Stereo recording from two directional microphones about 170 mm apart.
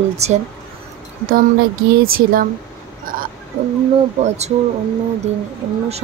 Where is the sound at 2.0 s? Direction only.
60° right (ahead or behind).